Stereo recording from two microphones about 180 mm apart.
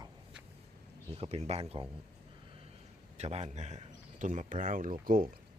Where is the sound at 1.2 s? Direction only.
35° right (ahead or behind).